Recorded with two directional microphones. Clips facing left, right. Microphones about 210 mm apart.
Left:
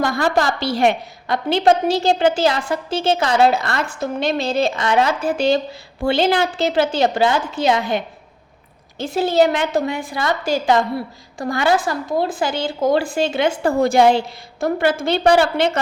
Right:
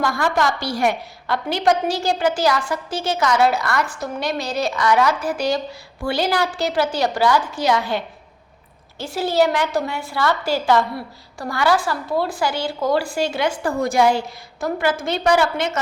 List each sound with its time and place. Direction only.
0.0 s a woman's voice: 25° left (ahead or behind)